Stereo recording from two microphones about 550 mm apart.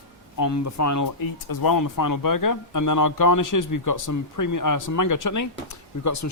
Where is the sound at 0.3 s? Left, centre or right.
Left.